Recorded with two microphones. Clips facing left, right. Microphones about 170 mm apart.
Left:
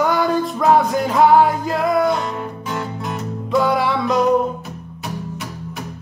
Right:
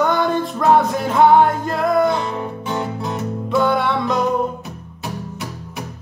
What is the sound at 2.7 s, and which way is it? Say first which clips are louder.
Music: right 2 dB; 25° right (ahead or behind).